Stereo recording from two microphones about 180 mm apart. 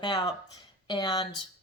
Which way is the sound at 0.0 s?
25° left (ahead or behind).